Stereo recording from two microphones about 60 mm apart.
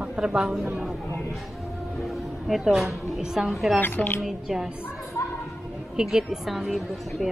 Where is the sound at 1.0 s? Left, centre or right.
Left.